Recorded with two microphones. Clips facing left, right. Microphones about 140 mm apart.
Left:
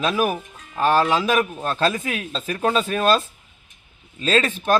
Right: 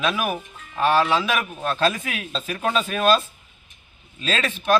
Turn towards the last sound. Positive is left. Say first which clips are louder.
# left 6 dB
turn(degrees=40)  # may be behind; listen again after turning